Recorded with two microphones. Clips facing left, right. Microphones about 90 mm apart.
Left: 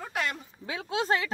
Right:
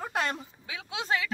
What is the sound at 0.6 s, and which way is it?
Speech, 40° left (ahead or behind).